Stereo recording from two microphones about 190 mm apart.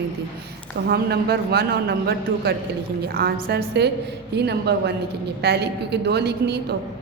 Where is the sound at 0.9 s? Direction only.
55° right (ahead or behind).